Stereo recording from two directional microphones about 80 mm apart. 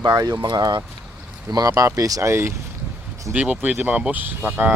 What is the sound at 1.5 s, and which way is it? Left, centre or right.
Speech, right.